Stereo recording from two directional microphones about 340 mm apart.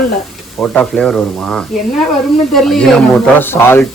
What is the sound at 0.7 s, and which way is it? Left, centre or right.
Speech, centre.